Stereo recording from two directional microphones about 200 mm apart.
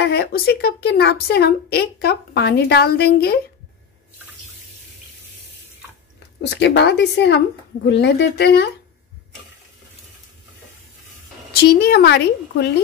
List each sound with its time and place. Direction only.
0.0 s a woman's voice: 55° left (ahead or behind)
6.5 s a woman's voice: 60° left (ahead or behind)
11.6 s a woman's voice: 55° left (ahead or behind)